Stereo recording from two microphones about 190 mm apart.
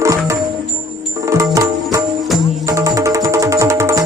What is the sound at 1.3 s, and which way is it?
Music, 15° right (ahead or behind).